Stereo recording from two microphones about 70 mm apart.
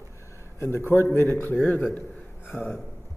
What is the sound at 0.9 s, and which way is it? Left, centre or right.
A man's voice, left.